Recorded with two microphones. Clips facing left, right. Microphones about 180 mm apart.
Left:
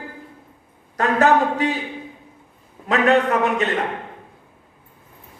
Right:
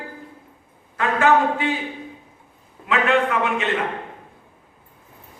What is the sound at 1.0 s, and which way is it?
Speech, 40° left (ahead or behind).